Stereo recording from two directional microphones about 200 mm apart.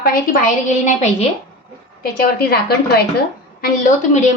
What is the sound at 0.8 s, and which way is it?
Speech, 35° left (ahead or behind).